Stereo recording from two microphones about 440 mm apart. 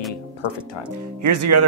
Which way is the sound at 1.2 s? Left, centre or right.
Right.